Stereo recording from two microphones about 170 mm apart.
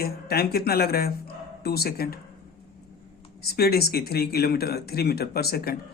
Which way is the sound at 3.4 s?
70° left (ahead or behind).